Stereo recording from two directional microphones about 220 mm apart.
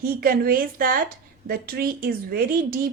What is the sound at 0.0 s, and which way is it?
A woman's voice, 40° right (ahead or behind).